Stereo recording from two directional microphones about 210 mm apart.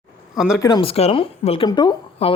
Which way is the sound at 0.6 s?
20° left (ahead or behind).